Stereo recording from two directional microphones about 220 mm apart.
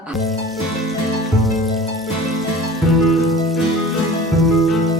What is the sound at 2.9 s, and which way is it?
Music, centre (ahead or behind).